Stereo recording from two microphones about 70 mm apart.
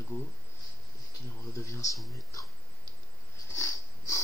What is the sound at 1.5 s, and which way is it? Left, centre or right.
Speech, left.